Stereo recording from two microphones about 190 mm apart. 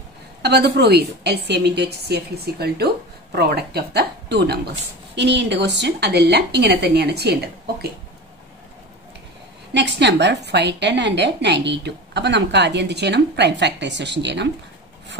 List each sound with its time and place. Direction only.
0.4 s a woman's voice: 60° right (ahead or behind)
9.8 s a woman's voice: 65° right (ahead or behind)